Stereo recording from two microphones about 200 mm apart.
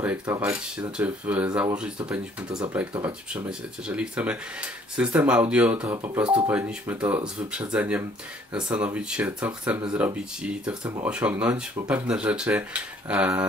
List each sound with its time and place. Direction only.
0.0 s speech: 10° right (ahead or behind)
3.3 s speech: 5° right (ahead or behind)
10.8 s speech: 20° right (ahead or behind)
11.1 s speech: 5° right (ahead or behind)